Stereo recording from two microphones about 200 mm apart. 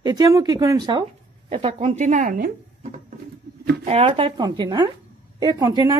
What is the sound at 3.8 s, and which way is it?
A woman's voice, 30° right (ahead or behind).